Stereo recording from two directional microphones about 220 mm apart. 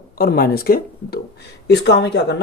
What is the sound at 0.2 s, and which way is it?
Speech, 45° left (ahead or behind).